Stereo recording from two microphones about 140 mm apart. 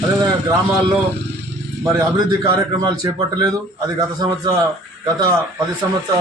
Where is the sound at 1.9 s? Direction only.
25° right (ahead or behind).